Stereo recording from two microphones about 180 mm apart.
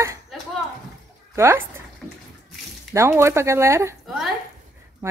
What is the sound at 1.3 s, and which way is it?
Speech, 15° right (ahead or behind).